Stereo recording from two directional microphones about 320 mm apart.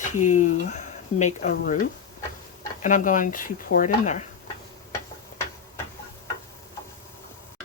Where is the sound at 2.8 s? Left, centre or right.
Left.